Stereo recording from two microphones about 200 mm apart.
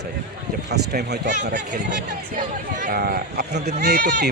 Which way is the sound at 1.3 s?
40° right (ahead or behind).